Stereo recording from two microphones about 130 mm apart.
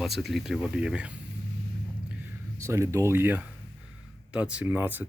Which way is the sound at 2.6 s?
20° right (ahead or behind).